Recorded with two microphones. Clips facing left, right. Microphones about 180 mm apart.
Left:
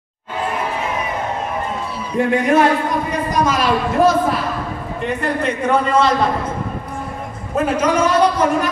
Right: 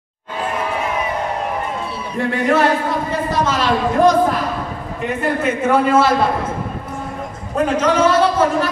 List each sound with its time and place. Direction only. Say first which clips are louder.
2.1 s a man's voice: left 2 dB; 20° left (ahead or behind)
5.0 s a man's voice: right 1 dB; 5° right (ahead or behind)
7.5 s a man's voice: right 1 dB; 10° left (ahead or behind)